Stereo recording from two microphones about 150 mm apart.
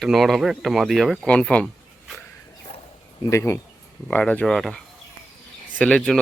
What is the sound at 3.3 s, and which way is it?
Speech, 20° left (ahead or behind).